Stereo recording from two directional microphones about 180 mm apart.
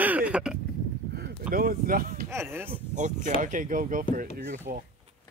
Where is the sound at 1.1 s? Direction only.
55° right (ahead or behind).